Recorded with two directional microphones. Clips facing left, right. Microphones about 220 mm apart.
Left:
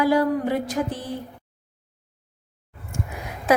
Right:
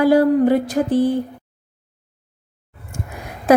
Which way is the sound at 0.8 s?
45° right (ahead or behind).